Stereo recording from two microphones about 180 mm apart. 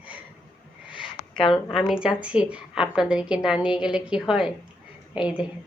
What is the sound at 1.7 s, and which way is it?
A woman's voice, centre (ahead or behind).